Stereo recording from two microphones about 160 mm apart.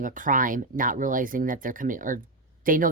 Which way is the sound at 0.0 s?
55° right (ahead or behind).